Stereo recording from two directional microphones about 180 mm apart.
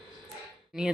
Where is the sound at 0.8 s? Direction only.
5° right (ahead or behind).